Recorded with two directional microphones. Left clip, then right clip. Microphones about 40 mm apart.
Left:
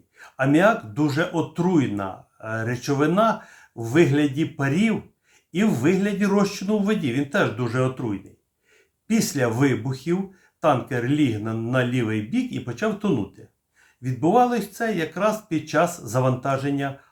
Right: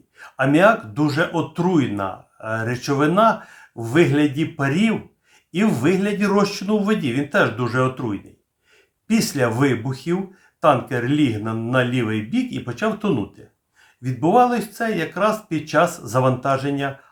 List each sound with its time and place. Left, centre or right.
0.2 s speech: right
5.5 s speech: right